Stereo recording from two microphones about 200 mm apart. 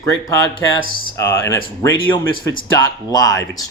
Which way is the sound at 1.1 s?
15° left (ahead or behind).